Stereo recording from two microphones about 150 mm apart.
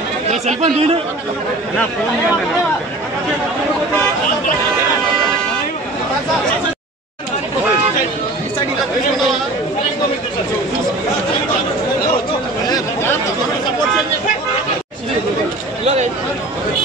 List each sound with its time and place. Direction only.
0.3 s speech: 45° right (ahead or behind)